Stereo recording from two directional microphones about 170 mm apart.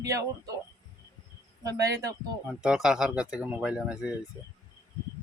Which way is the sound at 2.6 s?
5° right (ahead or behind).